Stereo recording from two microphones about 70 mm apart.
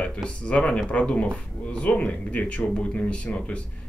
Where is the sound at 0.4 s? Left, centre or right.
Centre.